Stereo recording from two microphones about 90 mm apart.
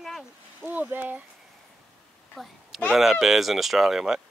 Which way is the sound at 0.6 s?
20° right (ahead or behind).